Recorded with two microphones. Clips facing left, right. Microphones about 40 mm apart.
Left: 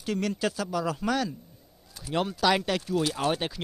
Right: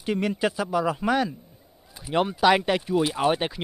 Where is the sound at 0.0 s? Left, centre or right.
Centre.